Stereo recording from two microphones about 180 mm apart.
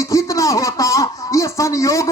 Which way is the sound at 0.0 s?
20° left (ahead or behind).